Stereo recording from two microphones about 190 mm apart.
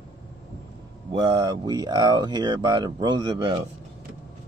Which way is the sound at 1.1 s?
25° right (ahead or behind).